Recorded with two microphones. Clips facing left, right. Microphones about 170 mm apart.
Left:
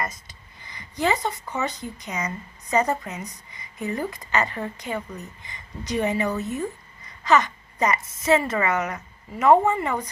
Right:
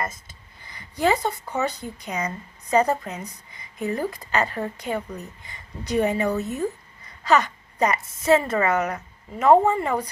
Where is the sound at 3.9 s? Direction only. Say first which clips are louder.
Right 2 dB; 40° right (ahead or behind).